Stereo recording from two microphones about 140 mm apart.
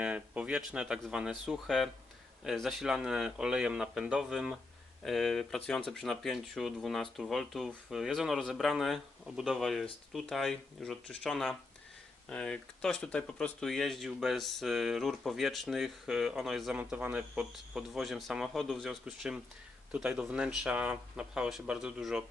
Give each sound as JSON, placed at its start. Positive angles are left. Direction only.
{"t": 0.0, "sound": "speech", "side_deg": -10}